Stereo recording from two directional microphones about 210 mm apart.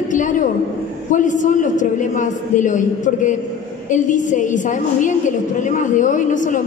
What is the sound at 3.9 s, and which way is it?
A woman's voice, 35° left (ahead or behind).